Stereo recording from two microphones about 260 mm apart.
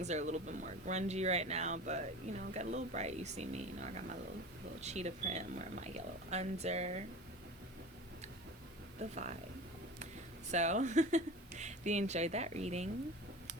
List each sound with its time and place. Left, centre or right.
0.0 s speech: right
9.0 s speech: right
10.5 s speech: right